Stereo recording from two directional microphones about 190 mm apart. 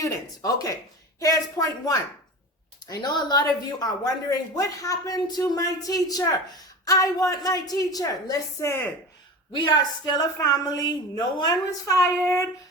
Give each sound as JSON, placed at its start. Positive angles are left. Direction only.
{"t": 0.0, "sound": "a woman's voice", "side_deg": 15}